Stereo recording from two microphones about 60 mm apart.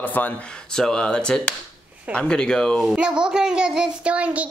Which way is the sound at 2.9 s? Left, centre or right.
Centre.